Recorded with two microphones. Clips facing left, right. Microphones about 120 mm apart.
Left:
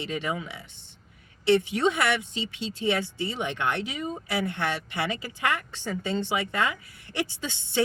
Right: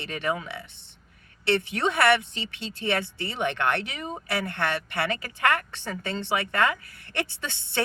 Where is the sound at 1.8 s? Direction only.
60° right (ahead or behind).